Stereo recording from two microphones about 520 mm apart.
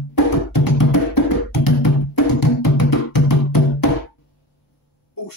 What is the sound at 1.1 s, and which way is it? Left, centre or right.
Music, left.